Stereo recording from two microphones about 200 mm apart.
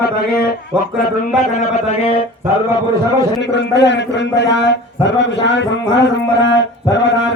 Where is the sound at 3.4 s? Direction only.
60° left (ahead or behind).